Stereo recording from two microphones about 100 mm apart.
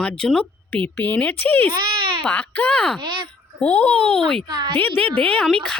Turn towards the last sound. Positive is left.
turn(degrees=5)  # may be behind; listen again after turning